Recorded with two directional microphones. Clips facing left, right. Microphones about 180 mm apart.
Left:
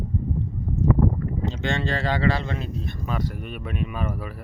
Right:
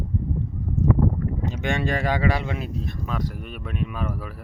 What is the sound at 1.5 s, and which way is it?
Speech, 10° right (ahead or behind).